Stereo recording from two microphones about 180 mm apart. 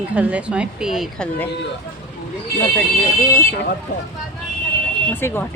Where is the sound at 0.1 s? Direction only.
5° right (ahead or behind).